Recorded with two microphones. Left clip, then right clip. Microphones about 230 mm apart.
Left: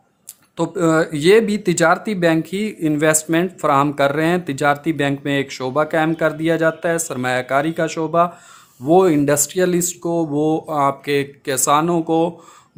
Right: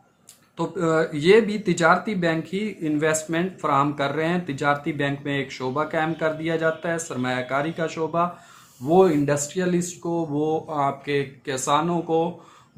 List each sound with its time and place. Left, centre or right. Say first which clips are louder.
0.5 s speech: left 5 dB; left